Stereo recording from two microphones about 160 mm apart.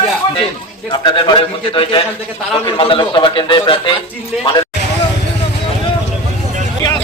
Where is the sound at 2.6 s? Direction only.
30° left (ahead or behind).